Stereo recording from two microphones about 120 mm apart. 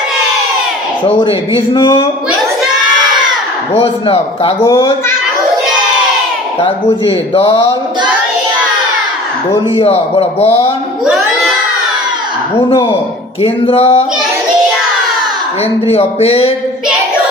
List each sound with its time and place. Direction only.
1.0 s speech: 50° left (ahead or behind)
3.8 s speech: 55° left (ahead or behind)
6.6 s speech: 50° left (ahead or behind)
9.7 s speech: 55° left (ahead or behind)
11.0 s crowd: 5° right (ahead or behind)
13.4 s speech: 55° left (ahead or behind)
15.9 s speech: 55° left (ahead or behind)